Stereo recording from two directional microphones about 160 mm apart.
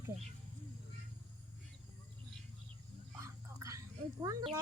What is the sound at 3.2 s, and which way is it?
Whispering, 20° right (ahead or behind).